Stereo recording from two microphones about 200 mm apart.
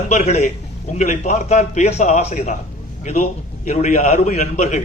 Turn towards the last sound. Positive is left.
turn(degrees=35)  # may be behind; listen again after turning